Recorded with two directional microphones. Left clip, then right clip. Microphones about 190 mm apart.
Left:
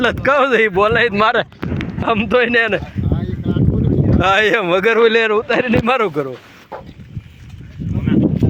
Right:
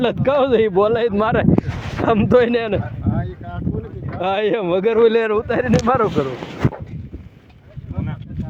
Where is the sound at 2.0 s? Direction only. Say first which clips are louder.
Even; 30° right (ahead or behind).